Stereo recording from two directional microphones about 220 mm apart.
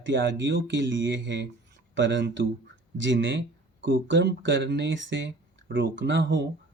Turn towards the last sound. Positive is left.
turn(degrees=-55)  # may be behind; listen again after turning